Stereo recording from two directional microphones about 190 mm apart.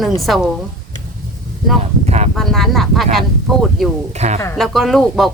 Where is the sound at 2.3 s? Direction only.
Centre (ahead or behind).